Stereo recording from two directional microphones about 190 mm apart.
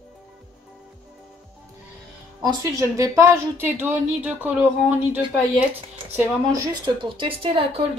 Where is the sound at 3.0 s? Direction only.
15° right (ahead or behind).